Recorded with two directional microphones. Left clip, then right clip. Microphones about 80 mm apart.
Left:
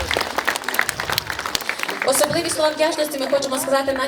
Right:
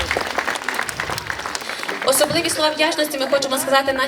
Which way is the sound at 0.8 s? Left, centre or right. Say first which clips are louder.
Left 2 dB; left.